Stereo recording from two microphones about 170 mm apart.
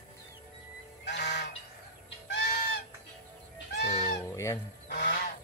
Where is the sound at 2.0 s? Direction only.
90° left.